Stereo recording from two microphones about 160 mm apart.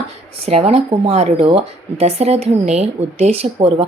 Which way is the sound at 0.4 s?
40° right (ahead or behind).